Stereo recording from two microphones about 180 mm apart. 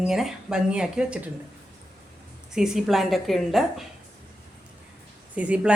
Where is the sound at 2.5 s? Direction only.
5° right (ahead or behind).